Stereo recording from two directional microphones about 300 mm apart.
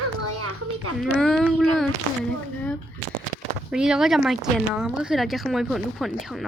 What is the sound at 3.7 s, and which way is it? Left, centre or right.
Speech, centre.